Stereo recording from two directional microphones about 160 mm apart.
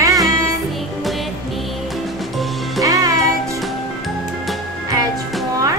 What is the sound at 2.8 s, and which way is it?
Music, 20° right (ahead or behind).